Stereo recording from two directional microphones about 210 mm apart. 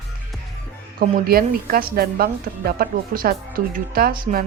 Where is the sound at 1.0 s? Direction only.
45° right (ahead or behind).